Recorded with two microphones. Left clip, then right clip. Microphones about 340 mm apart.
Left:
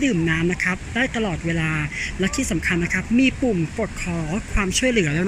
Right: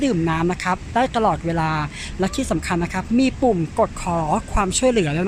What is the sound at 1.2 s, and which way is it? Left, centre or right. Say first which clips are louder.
Speech: right 6 dB; right.